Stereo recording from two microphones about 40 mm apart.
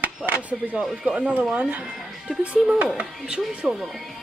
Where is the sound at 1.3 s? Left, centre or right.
Right.